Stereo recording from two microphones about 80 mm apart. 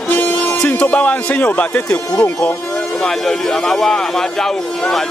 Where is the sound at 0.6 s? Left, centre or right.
Centre.